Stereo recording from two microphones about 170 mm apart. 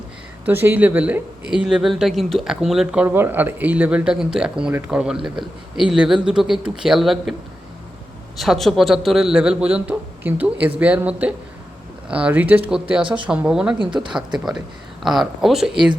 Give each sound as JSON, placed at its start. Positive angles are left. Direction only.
{"t": 0.4, "sound": "speech", "side_deg": -10}
{"t": 8.4, "sound": "speech", "side_deg": 0}
{"t": 13.0, "sound": "speech", "side_deg": -30}
{"t": 13.2, "sound": "speech", "side_deg": -5}